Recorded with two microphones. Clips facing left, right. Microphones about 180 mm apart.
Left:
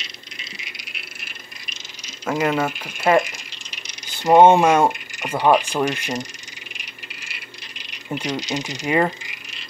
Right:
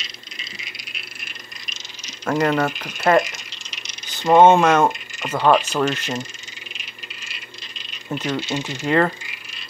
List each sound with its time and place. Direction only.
0.0 s frog: 60° left (ahead or behind)
2.2 s speech: 10° left (ahead or behind)
3.3 s a sound: 55° left (ahead or behind)
4.2 s speech: 15° left (ahead or behind)
6.8 s rattle: 15° left (ahead or behind)